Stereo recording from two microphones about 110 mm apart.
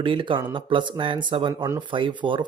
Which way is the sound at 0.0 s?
50° right (ahead or behind).